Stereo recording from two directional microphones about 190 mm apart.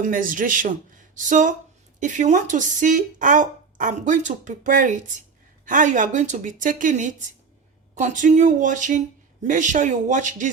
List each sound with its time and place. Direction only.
0.0 s a woman's voice: 45° right (ahead or behind)